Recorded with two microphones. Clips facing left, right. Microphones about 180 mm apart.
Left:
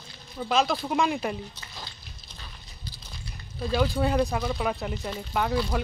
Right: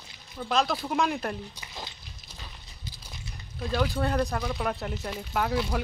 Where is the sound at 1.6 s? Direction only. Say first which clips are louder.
Right 2 dB; 20° right (ahead or behind).